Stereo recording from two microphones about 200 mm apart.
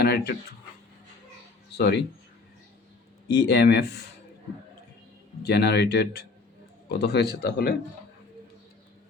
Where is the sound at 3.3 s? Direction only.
55° left (ahead or behind).